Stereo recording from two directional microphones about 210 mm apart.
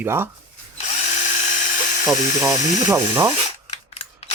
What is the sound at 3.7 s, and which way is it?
Camera, 30° left (ahead or behind).